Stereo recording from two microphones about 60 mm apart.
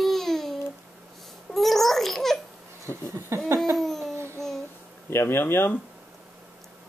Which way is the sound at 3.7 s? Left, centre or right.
Centre.